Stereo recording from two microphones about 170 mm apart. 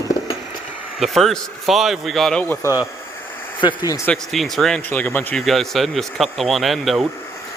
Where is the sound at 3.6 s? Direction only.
25° left (ahead or behind).